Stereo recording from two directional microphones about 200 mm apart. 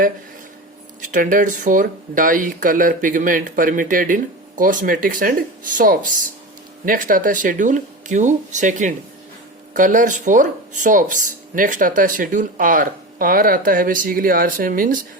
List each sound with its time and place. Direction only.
1.0 s speech: 40° right (ahead or behind)